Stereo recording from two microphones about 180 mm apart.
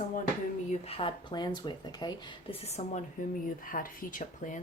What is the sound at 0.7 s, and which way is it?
Speech, 30° left (ahead or behind).